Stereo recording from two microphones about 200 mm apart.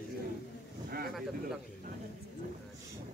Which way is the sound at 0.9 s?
50° right (ahead or behind).